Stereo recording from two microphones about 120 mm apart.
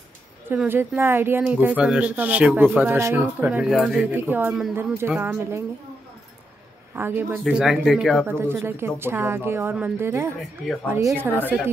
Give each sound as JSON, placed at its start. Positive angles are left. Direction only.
{"t": 0.7, "sound": "speech", "side_deg": -20}
{"t": 4.1, "sound": "a woman's voice", "side_deg": -15}
{"t": 7.0, "sound": "speech", "side_deg": -20}
{"t": 8.3, "sound": "a woman's voice", "side_deg": -20}